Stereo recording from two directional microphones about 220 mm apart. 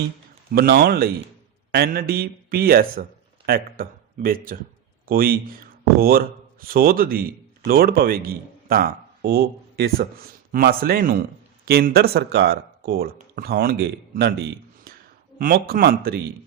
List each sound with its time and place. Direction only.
0.5 s a man's voice: 45° right (ahead or behind)